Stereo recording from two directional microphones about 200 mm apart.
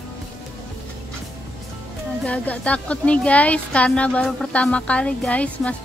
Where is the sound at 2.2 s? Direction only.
5° left (ahead or behind).